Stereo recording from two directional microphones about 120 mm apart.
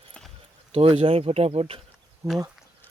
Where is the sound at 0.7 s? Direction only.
50° right (ahead or behind).